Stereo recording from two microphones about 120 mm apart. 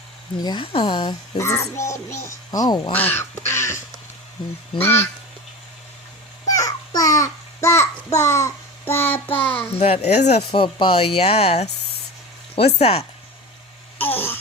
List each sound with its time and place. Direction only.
0.4 s speech: 40° left (ahead or behind)
1.4 s speech: 25° left (ahead or behind)
2.9 s speech: 15° left (ahead or behind)
4.8 s speech: 20° left (ahead or behind)
6.6 s babbling: 30° left (ahead or behind)
8.2 s child singing: 25° left (ahead or behind)
9.7 s speech: 60° left (ahead or behind)
10.5 s speech: 45° left (ahead or behind)
14.0 s a sound: 15° left (ahead or behind)